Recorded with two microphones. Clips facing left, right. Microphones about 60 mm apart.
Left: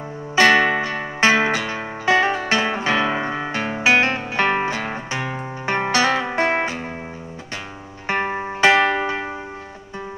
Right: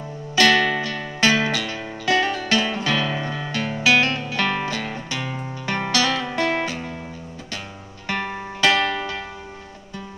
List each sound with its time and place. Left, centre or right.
0.4 s music: left
8.1 s music: left